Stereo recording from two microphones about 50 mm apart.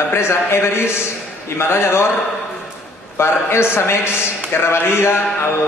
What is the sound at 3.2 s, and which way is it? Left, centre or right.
A man's voice, left.